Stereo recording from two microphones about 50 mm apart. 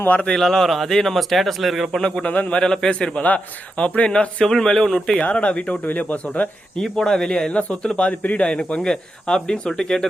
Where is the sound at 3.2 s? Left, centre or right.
Left; by 5.2 s centre.